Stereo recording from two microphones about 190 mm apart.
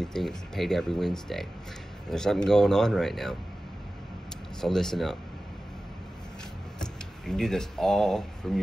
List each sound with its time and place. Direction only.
0.0 s speech: centre (ahead or behind)
4.6 s speech: centre (ahead or behind)
6.8 s speech: 5° left (ahead or behind)